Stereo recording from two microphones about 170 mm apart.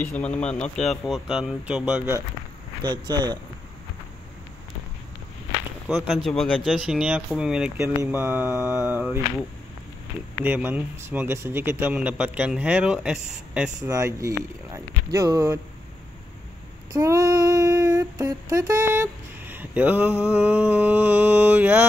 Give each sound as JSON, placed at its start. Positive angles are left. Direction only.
{"t": 0.0, "sound": "speech", "side_deg": 10}
{"t": 2.8, "sound": "a man's voice", "side_deg": -25}
{"t": 5.9, "sound": "speech", "side_deg": 0}
{"t": 7.7, "sound": "speech", "side_deg": -15}
{"t": 10.4, "sound": "speech", "side_deg": -10}
{"t": 13.8, "sound": "a man's voice", "side_deg": -15}
{"t": 16.9, "sound": "female singing", "side_deg": -20}